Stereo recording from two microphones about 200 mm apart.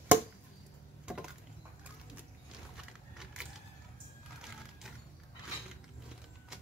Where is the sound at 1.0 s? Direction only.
5° right (ahead or behind).